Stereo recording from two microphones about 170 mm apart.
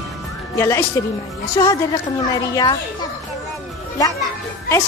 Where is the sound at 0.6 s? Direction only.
15° left (ahead or behind).